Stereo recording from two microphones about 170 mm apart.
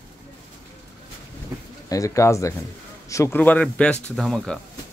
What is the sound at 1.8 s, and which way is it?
Speech, 20° left (ahead or behind).